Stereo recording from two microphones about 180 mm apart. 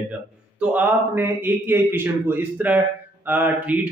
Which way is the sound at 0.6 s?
10° right (ahead or behind).